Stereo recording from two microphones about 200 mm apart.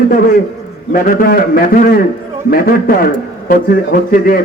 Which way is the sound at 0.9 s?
45° left (ahead or behind).